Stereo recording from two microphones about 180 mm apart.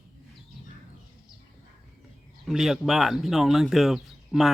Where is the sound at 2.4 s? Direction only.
Centre (ahead or behind).